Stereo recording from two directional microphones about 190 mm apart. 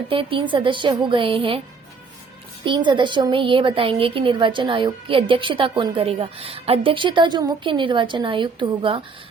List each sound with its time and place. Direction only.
0.1 s a woman's voice: 25° right (ahead or behind)
2.6 s a woman's voice: 25° right (ahead or behind)